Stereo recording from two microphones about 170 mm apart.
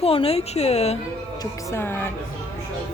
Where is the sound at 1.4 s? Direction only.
15° left (ahead or behind).